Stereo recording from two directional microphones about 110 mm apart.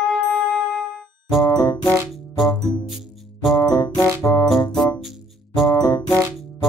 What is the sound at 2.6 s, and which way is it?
Music, centre (ahead or behind).